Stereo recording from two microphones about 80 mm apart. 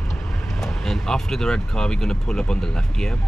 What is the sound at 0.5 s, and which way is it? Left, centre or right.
Speech, centre.